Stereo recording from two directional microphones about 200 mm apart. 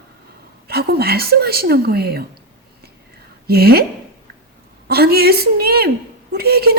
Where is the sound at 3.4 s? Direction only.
50° right (ahead or behind).